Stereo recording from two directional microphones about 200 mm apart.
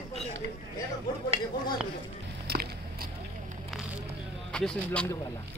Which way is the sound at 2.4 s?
50° right (ahead or behind).